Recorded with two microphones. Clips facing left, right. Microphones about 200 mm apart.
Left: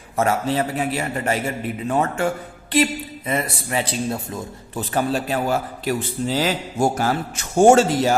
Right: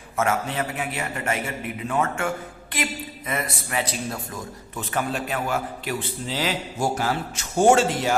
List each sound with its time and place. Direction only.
0.2 s a man's voice: 35° left (ahead or behind)